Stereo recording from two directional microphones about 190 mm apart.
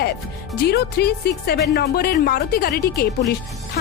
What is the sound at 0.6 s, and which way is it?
Speech, 60° left (ahead or behind).